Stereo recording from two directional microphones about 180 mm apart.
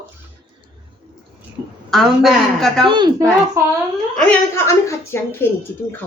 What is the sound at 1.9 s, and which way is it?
Speech, centre (ahead or behind).